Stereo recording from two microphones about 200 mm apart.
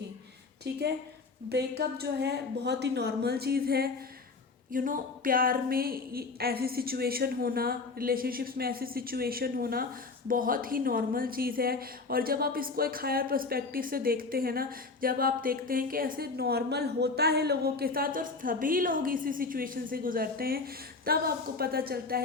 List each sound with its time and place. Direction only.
0.6 s a woman's voice: 55° right (ahead or behind)